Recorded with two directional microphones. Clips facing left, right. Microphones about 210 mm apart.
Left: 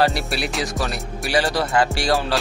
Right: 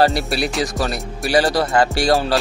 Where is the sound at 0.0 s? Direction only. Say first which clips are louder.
Right 4 dB; 35° right (ahead or behind).